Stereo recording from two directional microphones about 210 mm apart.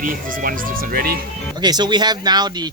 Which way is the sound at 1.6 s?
20° right (ahead or behind).